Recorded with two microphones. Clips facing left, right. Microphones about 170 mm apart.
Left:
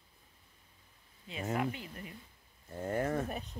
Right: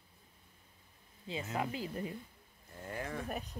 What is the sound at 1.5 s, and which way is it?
Speech, 30° right (ahead or behind).